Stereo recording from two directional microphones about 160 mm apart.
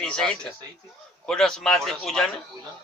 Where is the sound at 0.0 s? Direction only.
5° left (ahead or behind).